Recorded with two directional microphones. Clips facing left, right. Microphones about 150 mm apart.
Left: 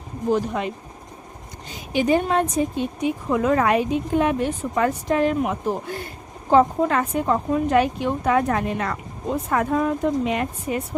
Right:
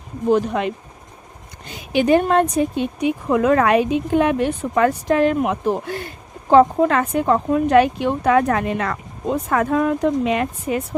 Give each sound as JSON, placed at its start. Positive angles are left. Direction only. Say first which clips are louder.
{"t": 0.3, "sound": "a woman's voice", "louder": "right 4 dB", "side_deg": -70}